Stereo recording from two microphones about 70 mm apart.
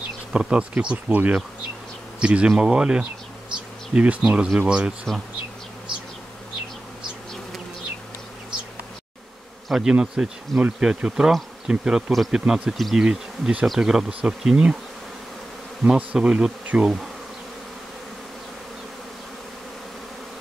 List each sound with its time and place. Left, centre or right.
0.3 s bee: centre
9.7 s bee: centre
12.1 s speech: centre
12.4 s bee: centre
12.7 s speech: centre
13.0 s bee: centre
15.8 s bee: centre